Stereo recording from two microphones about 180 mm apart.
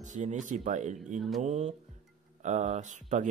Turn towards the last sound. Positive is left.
turn(degrees=-45)  # may be behind; listen again after turning